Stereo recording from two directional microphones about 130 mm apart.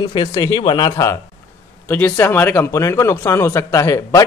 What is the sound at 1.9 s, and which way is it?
A man's voice, 15° left (ahead or behind).